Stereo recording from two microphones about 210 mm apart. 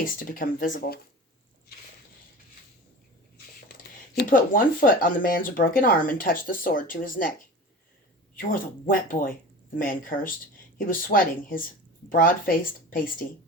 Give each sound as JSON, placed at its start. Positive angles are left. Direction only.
{"t": 0.0, "sound": "speech", "side_deg": 40}
{"t": 4.2, "sound": "speech", "side_deg": 40}
{"t": 8.4, "sound": "speech", "side_deg": 40}